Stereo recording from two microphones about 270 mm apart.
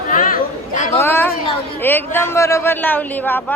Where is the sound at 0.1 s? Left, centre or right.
Left.